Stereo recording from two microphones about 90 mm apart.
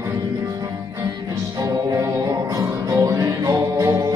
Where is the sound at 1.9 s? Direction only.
40° right (ahead or behind).